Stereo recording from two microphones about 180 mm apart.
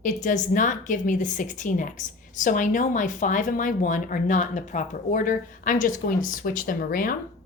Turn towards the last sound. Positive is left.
turn(degrees=50)  # may be behind; listen again after turning